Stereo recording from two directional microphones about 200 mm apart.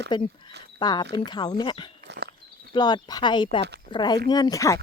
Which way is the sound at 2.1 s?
55° right (ahead or behind).